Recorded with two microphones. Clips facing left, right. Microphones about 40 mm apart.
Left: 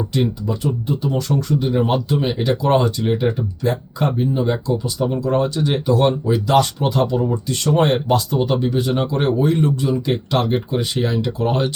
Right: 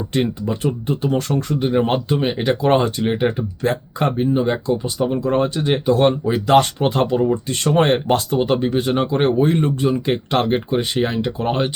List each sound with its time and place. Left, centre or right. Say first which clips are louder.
0.1 s speech: even; right
11.1 s speech: left 1 dB; right